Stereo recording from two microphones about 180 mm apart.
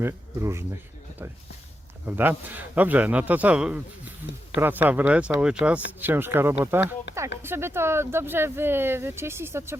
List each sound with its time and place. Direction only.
0.0 s speech: 15° right (ahead or behind)
2.0 s speech: 10° right (ahead or behind)
7.1 s a sound: 75° left (ahead or behind)
7.4 s speech: 15° right (ahead or behind)